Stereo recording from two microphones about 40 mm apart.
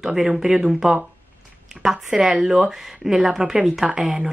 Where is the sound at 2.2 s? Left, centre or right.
Centre.